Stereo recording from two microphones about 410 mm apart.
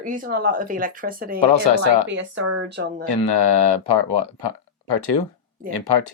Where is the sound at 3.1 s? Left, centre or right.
Left.